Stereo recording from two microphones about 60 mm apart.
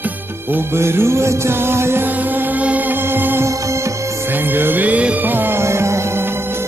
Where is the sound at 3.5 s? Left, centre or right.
Right.